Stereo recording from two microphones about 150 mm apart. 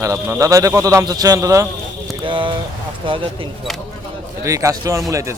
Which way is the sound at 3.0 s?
35° right (ahead or behind).